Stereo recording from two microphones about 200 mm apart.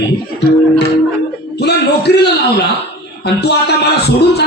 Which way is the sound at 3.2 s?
55° left (ahead or behind).